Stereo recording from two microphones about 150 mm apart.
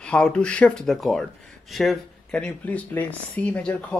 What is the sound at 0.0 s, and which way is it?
Speech, 5° left (ahead or behind).